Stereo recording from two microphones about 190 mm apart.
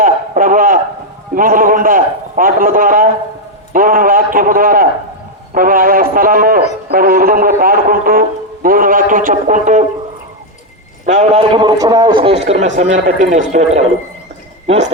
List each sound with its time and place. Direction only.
0.0 s a sound: 45° right (ahead or behind)
1.4 s a man's voice: 45° right (ahead or behind)
11.0 s a man's voice: 40° right (ahead or behind)